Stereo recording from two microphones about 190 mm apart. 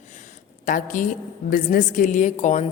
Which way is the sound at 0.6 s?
45° left (ahead or behind).